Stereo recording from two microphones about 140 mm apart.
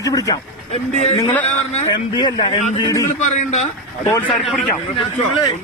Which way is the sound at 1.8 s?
30° left (ahead or behind).